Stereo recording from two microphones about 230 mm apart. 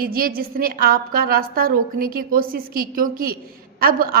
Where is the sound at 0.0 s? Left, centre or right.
Right.